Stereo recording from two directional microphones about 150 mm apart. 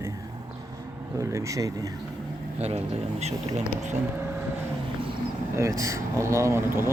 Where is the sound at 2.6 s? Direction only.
45° right (ahead or behind).